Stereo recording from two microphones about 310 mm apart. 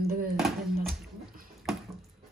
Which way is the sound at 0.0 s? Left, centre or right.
Right.